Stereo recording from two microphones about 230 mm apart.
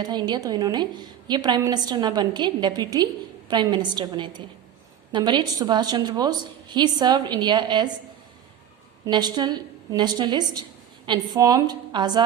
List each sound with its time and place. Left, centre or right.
0.0 s a woman's voice: centre
9.0 s a woman's voice: centre